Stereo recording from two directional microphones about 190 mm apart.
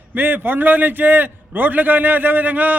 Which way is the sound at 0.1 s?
10° right (ahead or behind).